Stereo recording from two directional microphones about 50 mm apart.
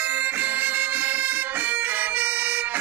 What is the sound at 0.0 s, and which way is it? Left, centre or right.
Bagpipes, right.